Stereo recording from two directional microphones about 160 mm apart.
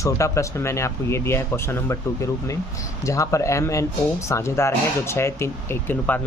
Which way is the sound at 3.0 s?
20° left (ahead or behind).